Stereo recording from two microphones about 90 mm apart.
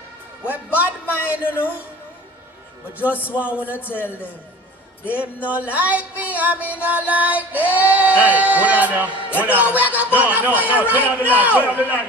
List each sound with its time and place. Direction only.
0.4 s music: 15° right (ahead or behind)
3.3 s music: 15° right (ahead or behind)
10.1 s a man's voice: 20° right (ahead or behind)